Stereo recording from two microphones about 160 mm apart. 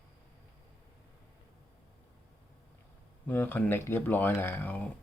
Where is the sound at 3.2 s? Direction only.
15° left (ahead or behind).